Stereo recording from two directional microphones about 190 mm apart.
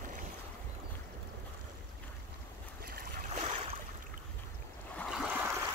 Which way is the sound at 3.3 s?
30° right (ahead or behind).